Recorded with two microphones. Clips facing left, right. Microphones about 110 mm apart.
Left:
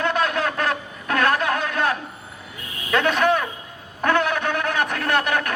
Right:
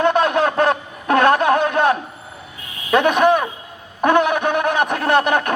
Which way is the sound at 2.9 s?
20° right (ahead or behind).